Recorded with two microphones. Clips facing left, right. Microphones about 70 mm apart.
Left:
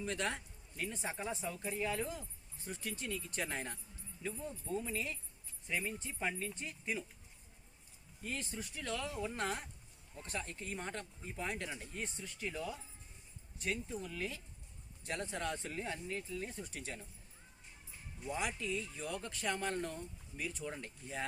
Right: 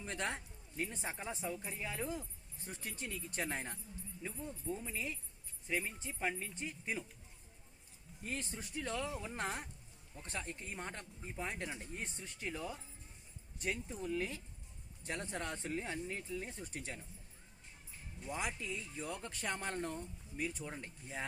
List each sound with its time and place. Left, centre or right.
0.0 s speech: right
1.5 s speech: centre
2.6 s speech: right
4.8 s speech: centre
8.2 s speech: right
18.3 s speech: right
20.7 s speech: centre